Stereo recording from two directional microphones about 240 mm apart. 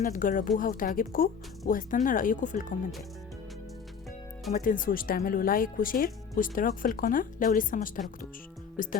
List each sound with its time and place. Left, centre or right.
0.0 s speech: left
4.5 s speech: left